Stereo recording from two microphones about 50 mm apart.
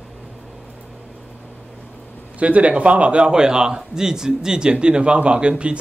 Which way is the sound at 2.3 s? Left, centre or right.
Right.